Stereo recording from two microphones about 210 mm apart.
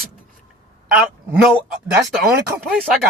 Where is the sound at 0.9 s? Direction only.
5° right (ahead or behind).